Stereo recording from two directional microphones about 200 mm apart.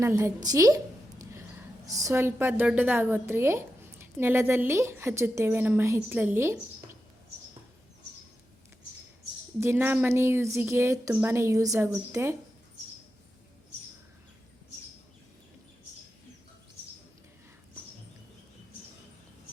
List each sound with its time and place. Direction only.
0.0 s a woman's voice: 15° right (ahead or behind)
1.9 s a woman's voice: 15° right (ahead or behind)
9.6 s a woman's voice: 10° right (ahead or behind)